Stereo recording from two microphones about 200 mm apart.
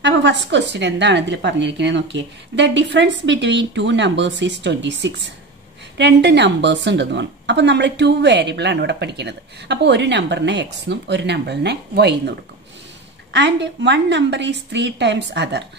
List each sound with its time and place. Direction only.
0.0 s a woman's voice: 60° right (ahead or behind)